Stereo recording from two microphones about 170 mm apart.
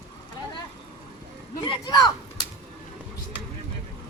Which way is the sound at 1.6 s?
25° left (ahead or behind).